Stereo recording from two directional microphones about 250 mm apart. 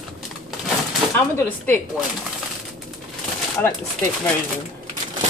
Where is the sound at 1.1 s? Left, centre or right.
Centre.